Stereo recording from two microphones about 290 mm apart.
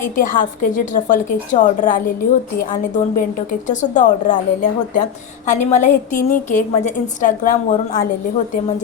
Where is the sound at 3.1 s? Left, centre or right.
Left.